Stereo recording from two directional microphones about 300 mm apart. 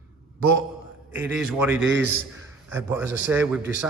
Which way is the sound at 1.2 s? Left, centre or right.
Centre.